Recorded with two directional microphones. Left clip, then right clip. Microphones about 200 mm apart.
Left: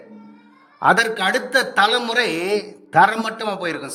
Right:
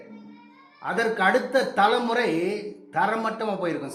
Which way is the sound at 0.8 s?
60° left (ahead or behind).